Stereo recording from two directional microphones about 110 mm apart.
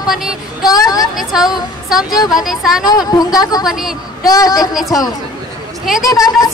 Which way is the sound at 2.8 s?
35° left (ahead or behind).